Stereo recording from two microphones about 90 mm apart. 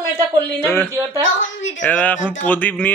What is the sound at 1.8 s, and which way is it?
Speech, 15° left (ahead or behind).